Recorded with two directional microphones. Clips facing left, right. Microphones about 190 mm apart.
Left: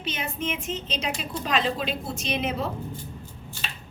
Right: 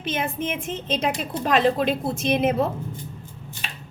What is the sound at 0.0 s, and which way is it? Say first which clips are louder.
A woman's voice: right 4 dB; 50° right (ahead or behind).